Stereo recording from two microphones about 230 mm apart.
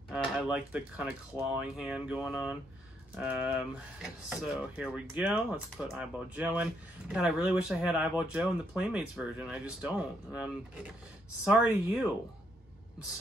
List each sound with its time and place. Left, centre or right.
0.1 s speech: centre